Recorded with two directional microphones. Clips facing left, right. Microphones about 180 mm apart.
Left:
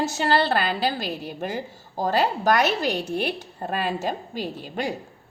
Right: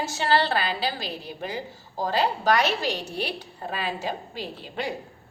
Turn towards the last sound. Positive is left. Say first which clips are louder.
# left 4 dB
turn(degrees=45)  # may be behind; listen again after turning